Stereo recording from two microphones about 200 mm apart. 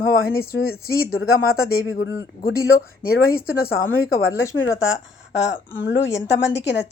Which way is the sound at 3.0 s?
50° left (ahead or behind).